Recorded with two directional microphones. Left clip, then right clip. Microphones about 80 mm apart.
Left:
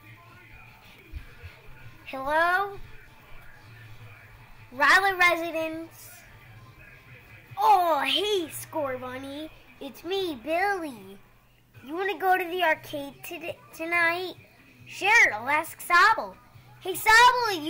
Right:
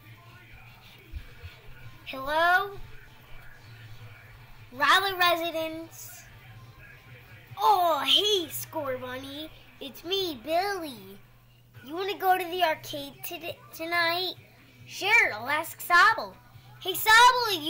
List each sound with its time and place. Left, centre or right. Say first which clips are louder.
2.0 s a child's voice: even; left
4.7 s speech: left 3 dB; left
7.5 s a child's voice: left 2 dB; left
15.0 s a child's voice: left 3 dB; left
15.3 s a child's voice: left 3 dB; left
15.9 s a child's voice: left 1 dB; left
16.8 s speech: even; left